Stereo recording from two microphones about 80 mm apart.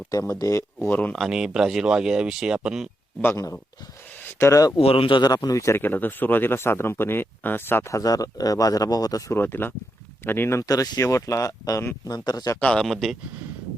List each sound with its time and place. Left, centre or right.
0.1 s speech: left
1.3 s speech: centre
4.2 s speech: left
4.9 s speech: left
5.3 s speech: left
5.8 s speech: left
7.9 s speech: left
9.3 s speech: left
10.6 s speech: left
12.5 s speech: centre
12.8 s speech: centre